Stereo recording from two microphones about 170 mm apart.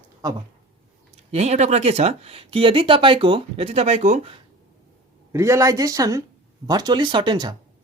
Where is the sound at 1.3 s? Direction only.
40° right (ahead or behind).